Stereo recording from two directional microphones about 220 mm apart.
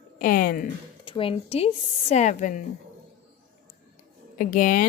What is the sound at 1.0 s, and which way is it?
Speech, 25° left (ahead or behind).